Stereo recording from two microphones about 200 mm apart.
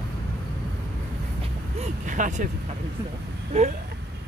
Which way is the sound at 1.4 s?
35° right (ahead or behind).